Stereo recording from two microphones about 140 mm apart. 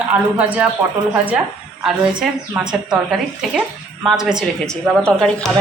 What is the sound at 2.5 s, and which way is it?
Speech, 5° right (ahead or behind).